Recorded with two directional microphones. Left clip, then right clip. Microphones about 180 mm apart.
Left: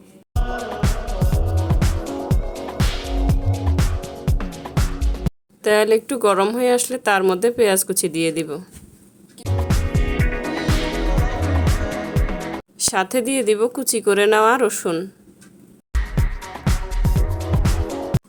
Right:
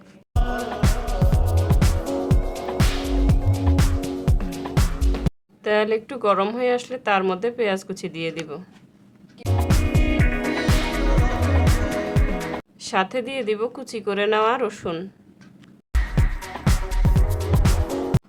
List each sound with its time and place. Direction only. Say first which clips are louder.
0.3 s music: even; centre (ahead or behind)
5.6 s speech: left 5 dB; 30° left (ahead or behind)
9.4 s music: right 1 dB; centre (ahead or behind)
12.8 s a woman's voice: left 3 dB; 30° left (ahead or behind)
15.9 s music: even; centre (ahead or behind)